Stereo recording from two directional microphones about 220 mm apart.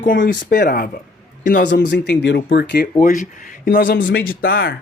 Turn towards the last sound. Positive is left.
turn(degrees=45)  # may be behind; listen again after turning